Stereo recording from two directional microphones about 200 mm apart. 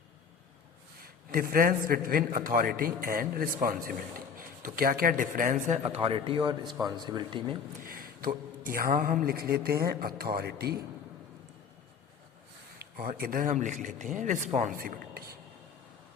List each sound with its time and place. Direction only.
1.0 s a man's voice: 45° right (ahead or behind); by 7.5 s 25° right (ahead or behind)
7.8 s a sound: 45° right (ahead or behind)
8.6 s a man's voice: 45° right (ahead or behind)
12.8 s a man's voice: 45° right (ahead or behind)